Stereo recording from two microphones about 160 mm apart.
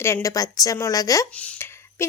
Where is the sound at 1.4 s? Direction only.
15° left (ahead or behind).